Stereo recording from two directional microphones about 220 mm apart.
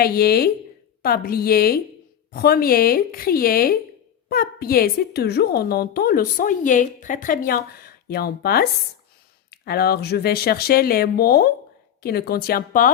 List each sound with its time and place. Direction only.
0.0 s a woman's voice: 45° left (ahead or behind)